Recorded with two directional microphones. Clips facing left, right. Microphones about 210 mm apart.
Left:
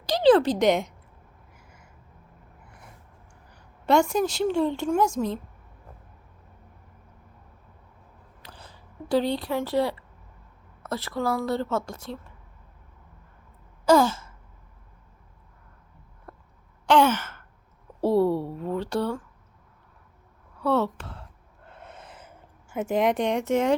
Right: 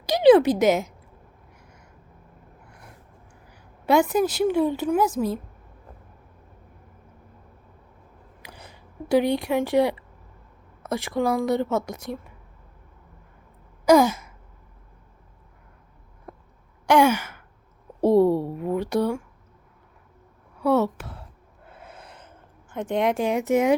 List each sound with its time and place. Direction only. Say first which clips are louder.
0.0 s a sound: right 3 dB; 10° right (ahead or behind); by 1.9 s 5° left (ahead or behind)
3.5 s a woman's voice: right 1 dB; 5° right (ahead or behind)
8.4 s a sound: right 2 dB; 15° right (ahead or behind)
10.8 s a woman's voice: right 4 dB; 15° right (ahead or behind)
13.8 s sigh: right 3 dB; 15° right (ahead or behind)
16.3 s a sound: right 4 dB; 15° right (ahead or behind)
16.8 s sigh: right 2 dB; 10° right (ahead or behind)
18.0 s speech: right 4 dB; 15° right (ahead or behind)
20.6 s speech: right 3 dB; 10° right (ahead or behind)
21.7 s gasp: even; centre (ahead or behind)
22.7 s a woman's voice: even; 5° left (ahead or behind)